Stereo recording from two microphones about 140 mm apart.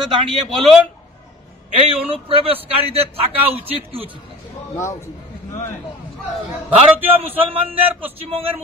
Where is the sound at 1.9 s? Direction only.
45° right (ahead or behind).